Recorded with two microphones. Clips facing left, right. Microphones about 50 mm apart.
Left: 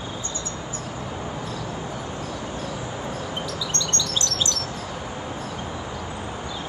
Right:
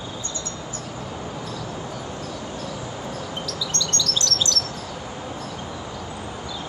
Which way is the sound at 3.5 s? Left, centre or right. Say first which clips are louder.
Even; left.